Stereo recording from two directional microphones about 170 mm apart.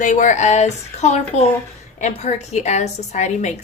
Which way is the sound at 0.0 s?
45° left (ahead or behind).